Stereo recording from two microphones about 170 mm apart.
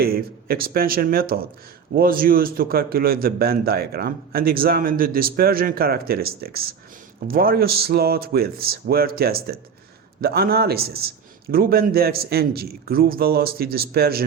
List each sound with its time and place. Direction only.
0.0 s a man's voice: 60° right (ahead or behind)